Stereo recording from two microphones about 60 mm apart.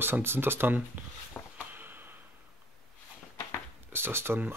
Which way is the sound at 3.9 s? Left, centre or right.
Right.